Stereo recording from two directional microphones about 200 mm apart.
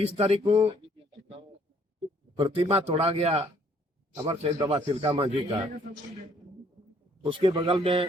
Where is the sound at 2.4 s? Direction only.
25° right (ahead or behind).